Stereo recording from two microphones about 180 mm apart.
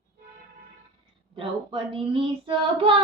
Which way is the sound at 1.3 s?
30° right (ahead or behind).